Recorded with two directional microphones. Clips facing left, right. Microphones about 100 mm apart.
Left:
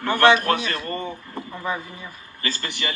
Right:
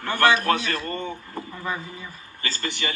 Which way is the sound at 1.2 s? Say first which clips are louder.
Left 2 dB; 30° left (ahead or behind).